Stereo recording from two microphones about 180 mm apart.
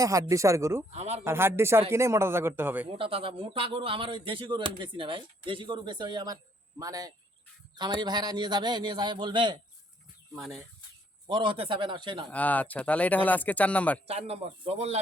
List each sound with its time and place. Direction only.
0.0 s a man's voice: 20° right (ahead or behind)
0.9 s speech: 40° right (ahead or behind)
1.2 s a man's voice: 15° right (ahead or behind)
3.0 s speech: 30° right (ahead or behind)
11.3 s speech: 30° right (ahead or behind)
12.3 s speech: 10° left (ahead or behind)
14.1 s speech: 35° right (ahead or behind)